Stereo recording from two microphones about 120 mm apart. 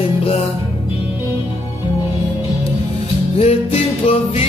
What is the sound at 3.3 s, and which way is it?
Music, 55° left (ahead or behind).